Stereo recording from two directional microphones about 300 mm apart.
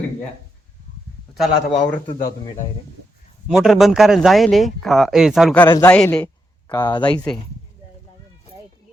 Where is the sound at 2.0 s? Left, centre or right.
Left.